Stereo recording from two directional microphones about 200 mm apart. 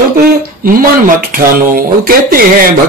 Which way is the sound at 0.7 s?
45° right (ahead or behind).